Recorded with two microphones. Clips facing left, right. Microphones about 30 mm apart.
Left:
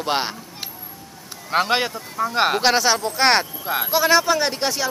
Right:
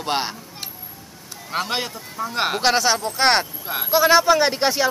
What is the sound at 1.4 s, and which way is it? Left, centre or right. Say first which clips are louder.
Speech: left 5 dB; centre.